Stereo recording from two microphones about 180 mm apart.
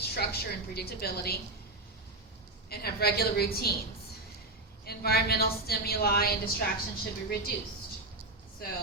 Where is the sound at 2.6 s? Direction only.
60° left (ahead or behind).